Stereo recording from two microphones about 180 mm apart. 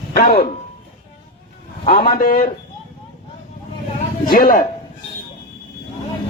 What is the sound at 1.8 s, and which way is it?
Speech, 55° left (ahead or behind).